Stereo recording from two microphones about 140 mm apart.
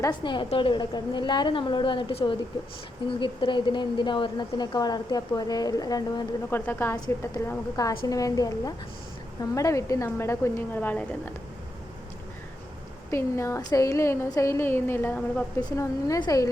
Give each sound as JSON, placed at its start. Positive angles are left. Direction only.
{"t": 0.2, "sound": "a woman's voice", "side_deg": 35}
{"t": 6.5, "sound": "a woman's voice", "side_deg": 15}
{"t": 13.1, "sound": "a woman's voice", "side_deg": 20}